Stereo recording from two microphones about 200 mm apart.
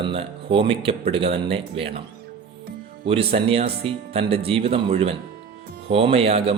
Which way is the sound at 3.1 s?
30° right (ahead or behind).